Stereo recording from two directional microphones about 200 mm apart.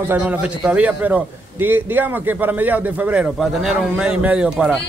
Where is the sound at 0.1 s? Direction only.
5° right (ahead or behind).